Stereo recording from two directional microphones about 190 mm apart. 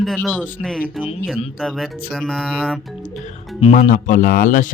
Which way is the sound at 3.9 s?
45° left (ahead or behind).